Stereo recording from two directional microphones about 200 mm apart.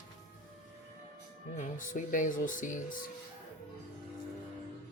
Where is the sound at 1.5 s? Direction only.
40° left (ahead or behind).